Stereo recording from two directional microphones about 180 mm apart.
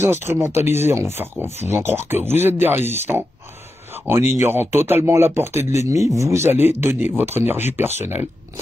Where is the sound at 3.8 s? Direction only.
10° right (ahead or behind).